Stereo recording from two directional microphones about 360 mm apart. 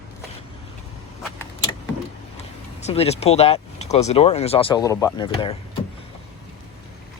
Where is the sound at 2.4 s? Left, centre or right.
Centre.